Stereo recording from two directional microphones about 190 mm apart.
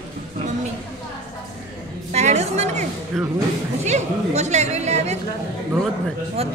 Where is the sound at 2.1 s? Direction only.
35° right (ahead or behind).